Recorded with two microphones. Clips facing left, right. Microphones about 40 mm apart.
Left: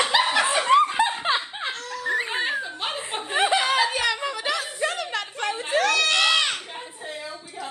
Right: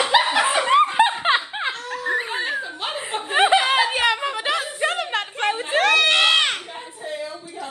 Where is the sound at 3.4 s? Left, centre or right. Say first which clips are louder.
Right 4 dB; right.